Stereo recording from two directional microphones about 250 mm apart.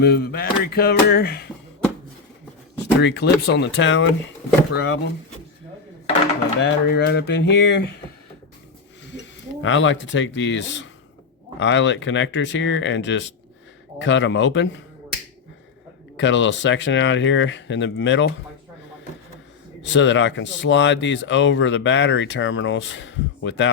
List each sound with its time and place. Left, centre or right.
0.0 s speech: left
2.7 s speech: left
6.6 s speech: left
9.6 s speech: left
16.1 s speech: left
19.8 s speech: left